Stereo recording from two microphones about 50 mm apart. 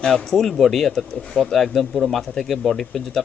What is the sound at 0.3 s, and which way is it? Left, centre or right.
Speech, centre.